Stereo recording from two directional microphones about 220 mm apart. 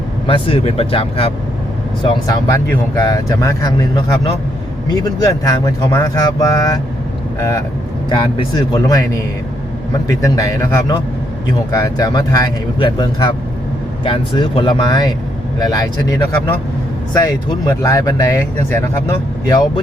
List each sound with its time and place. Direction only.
0.3 s speech: 25° left (ahead or behind)
10.1 s speech: 15° left (ahead or behind)